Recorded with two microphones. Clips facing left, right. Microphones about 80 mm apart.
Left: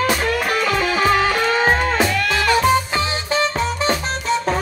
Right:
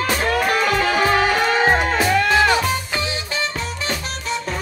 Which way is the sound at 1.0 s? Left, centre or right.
Centre.